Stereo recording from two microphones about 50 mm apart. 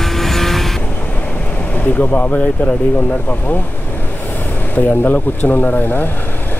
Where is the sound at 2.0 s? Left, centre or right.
Left.